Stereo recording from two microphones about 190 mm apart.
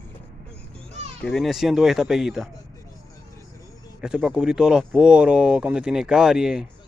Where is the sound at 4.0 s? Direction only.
5° right (ahead or behind).